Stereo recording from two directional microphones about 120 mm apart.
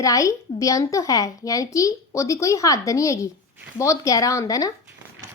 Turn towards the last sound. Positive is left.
turn(degrees=30)  # may be behind; listen again after turning